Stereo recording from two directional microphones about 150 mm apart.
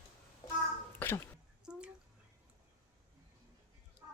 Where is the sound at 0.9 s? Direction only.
15° left (ahead or behind).